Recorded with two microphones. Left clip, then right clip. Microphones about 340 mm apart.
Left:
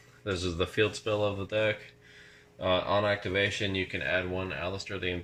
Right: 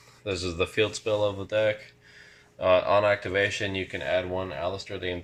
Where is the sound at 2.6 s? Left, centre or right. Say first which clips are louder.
Right 6 dB; right.